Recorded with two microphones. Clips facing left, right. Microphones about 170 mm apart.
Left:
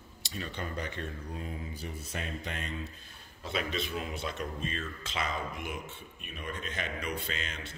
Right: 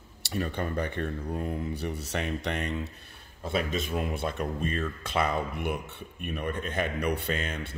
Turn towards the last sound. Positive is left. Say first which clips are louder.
# right 7 dB
turn(degrees=-55)  # may be behind; listen again after turning